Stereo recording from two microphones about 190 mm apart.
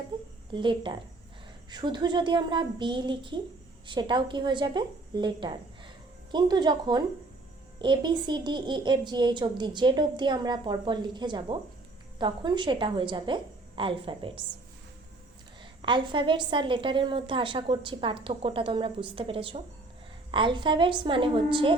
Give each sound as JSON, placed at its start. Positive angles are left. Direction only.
{"t": 0.1, "sound": "a sound", "side_deg": -25}
{"t": 0.5, "sound": "a woman's voice", "side_deg": -25}
{"t": 15.8, "sound": "a woman's voice", "side_deg": -25}